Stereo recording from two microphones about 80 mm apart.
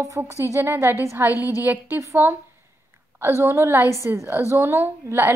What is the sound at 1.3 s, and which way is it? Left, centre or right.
Speech, left.